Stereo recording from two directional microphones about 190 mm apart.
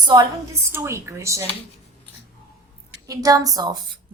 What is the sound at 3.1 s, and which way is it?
Speech, 20° right (ahead or behind).